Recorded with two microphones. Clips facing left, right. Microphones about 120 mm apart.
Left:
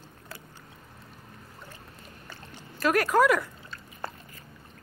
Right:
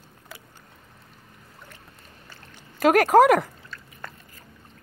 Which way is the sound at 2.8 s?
65° right (ahead or behind).